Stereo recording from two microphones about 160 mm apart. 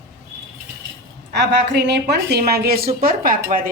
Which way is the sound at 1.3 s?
90° right.